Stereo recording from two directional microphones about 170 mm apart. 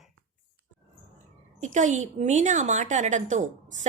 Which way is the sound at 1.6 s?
45° right (ahead or behind).